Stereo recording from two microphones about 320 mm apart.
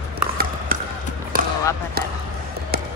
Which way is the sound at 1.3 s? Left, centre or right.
Right.